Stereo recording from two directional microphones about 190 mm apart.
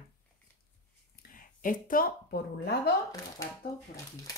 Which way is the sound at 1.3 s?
45° left (ahead or behind).